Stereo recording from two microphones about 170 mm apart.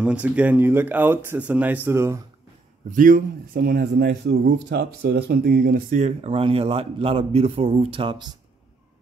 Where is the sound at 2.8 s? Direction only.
50° right (ahead or behind); by 5.8 s 70° right (ahead or behind).